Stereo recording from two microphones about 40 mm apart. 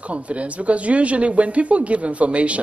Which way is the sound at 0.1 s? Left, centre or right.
Right.